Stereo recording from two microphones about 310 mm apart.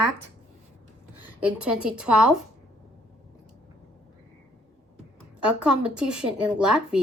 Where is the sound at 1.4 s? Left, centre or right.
Centre.